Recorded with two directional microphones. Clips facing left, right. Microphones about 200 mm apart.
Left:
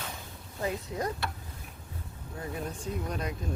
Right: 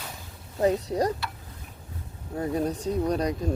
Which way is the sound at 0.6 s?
35° right (ahead or behind).